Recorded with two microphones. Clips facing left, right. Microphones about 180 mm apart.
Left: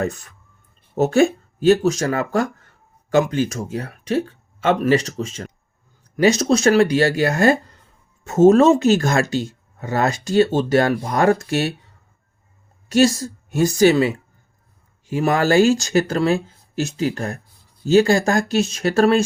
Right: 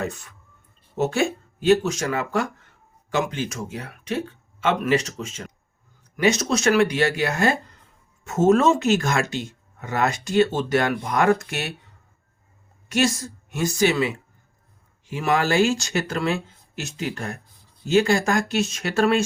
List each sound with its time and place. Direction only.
0.9 s speech: 40° left (ahead or behind)
12.9 s speech: 35° left (ahead or behind)
15.1 s speech: 40° left (ahead or behind)